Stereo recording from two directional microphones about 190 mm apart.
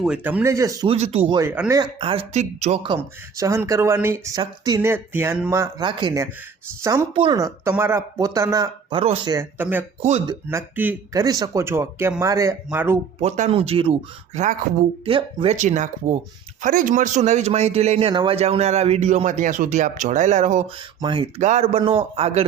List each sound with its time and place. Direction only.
0.0 s speech: 5° right (ahead or behind)
0.9 s speech: 30° right (ahead or behind)
1.4 s speech: 15° right (ahead or behind)
2.0 s a man's voice: 30° right (ahead or behind)
2.8 s speech: 20° right (ahead or behind)
5.8 s speech: 25° right (ahead or behind)
7.1 s speech: 25° right (ahead or behind)
9.3 s speech: 10° right (ahead or behind)
13.2 s a man's voice: 35° right (ahead or behind)
15.1 s speech: 30° right (ahead or behind)
15.5 s a man's voice: 40° right (ahead or behind)
21.0 s a man's voice: 25° right (ahead or behind)